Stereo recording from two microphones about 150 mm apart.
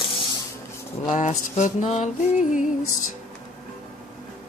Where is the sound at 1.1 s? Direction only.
50° left (ahead or behind).